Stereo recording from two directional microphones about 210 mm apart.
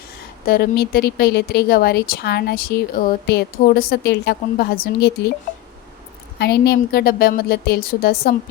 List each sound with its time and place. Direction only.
0.4 s speech: 45° left (ahead or behind)
6.4 s speech: 50° left (ahead or behind)